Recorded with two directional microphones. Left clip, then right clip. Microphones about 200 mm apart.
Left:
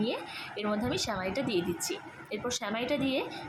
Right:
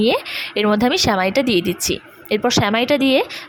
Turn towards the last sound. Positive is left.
turn(degrees=-45)  # may be behind; listen again after turning